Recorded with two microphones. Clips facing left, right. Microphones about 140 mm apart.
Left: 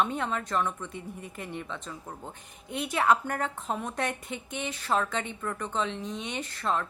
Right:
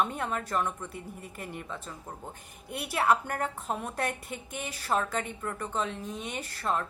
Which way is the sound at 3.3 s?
50° left (ahead or behind).